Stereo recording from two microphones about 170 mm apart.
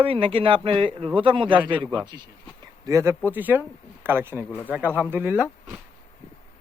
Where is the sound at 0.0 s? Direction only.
35° right (ahead or behind); by 5.5 s 10° right (ahead or behind).